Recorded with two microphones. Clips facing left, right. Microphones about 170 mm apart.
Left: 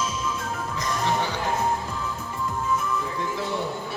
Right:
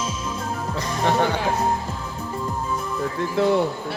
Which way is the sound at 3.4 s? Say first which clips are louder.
Right 17 dB; 60° right (ahead or behind).